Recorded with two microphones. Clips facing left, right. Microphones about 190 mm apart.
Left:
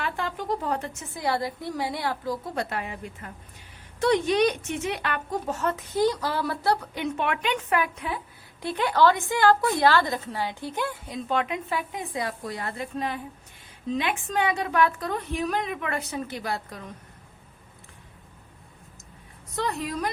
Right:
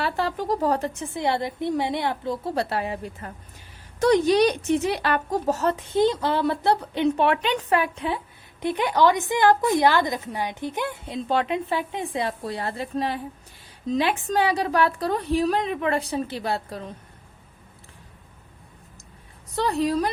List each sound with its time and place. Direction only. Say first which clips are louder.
0.0 s a woman's voice: right 5 dB; 35° right (ahead or behind)
8.6 s a woman's voice: right 1 dB; 15° right (ahead or behind)
19.5 s a woman's voice: right 6 dB; 30° right (ahead or behind)